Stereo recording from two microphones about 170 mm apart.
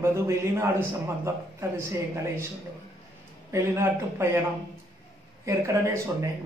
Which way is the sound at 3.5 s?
15° right (ahead or behind).